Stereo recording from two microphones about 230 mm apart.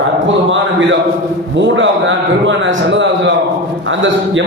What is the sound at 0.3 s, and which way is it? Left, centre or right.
A man's voice, right.